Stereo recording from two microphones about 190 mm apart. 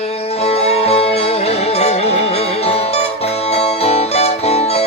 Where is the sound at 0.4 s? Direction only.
30° left (ahead or behind).